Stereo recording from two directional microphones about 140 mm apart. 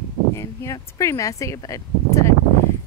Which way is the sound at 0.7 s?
20° left (ahead or behind).